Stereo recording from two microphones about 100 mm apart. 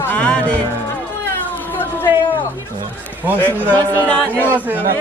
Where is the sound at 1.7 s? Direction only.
20° left (ahead or behind).